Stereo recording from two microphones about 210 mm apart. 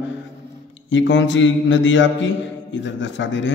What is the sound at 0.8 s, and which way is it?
Mantra, 60° left (ahead or behind).